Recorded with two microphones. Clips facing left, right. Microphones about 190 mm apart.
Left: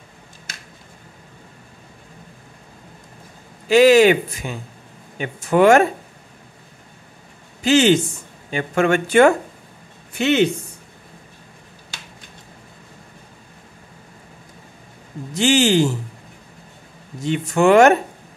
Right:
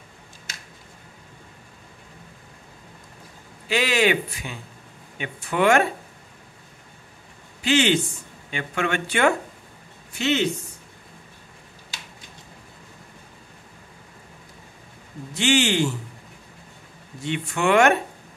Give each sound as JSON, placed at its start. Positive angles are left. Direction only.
{"t": 3.6, "sound": "speech", "side_deg": 40}
{"t": 7.6, "sound": "speech", "side_deg": 40}
{"t": 10.1, "sound": "speech", "side_deg": 55}
{"t": 15.3, "sound": "speech", "side_deg": 40}
{"t": 17.2, "sound": "speech", "side_deg": 40}